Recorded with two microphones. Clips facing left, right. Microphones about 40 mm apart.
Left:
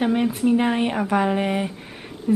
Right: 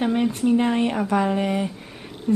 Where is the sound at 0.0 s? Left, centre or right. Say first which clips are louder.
Left 1 dB; centre.